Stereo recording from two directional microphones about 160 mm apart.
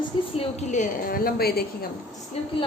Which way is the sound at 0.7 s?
65° left (ahead or behind).